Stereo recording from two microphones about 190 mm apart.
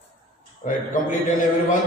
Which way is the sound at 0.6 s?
45° left (ahead or behind).